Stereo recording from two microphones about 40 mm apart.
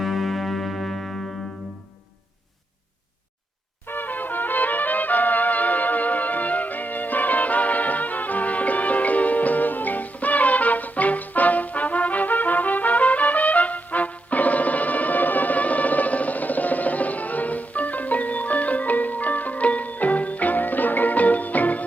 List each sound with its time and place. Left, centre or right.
0.0 s music: centre
3.8 s brass instrument: left